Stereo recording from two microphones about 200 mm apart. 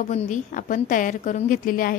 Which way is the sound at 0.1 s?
40° left (ahead or behind).